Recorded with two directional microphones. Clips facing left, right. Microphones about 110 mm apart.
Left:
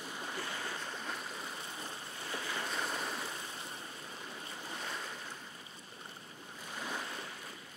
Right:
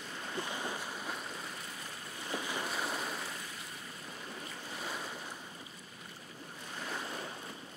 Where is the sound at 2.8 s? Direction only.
Centre (ahead or behind).